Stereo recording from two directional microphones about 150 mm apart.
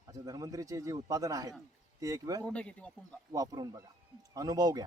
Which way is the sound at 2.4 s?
5° left (ahead or behind).